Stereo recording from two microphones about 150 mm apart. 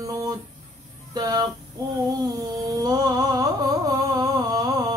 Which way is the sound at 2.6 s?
25° right (ahead or behind).